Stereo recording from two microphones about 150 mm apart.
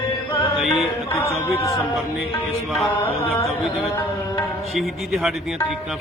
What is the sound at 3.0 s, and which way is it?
Mantra, 15° left (ahead or behind).